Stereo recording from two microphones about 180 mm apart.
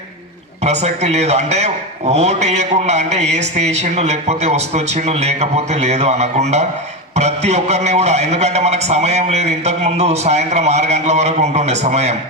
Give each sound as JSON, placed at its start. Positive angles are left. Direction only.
{"t": 0.6, "sound": "a man's voice", "side_deg": -40}